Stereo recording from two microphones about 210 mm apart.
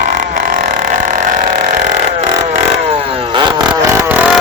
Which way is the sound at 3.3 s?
20° right (ahead or behind).